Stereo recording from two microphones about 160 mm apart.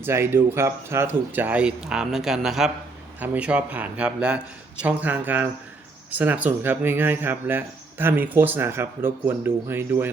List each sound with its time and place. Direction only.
0.0 s speech: 15° right (ahead or behind)